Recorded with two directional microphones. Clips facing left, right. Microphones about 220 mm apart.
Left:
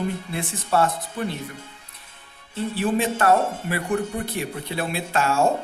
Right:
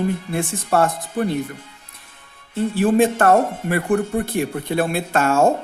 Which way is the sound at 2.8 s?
50° right (ahead or behind).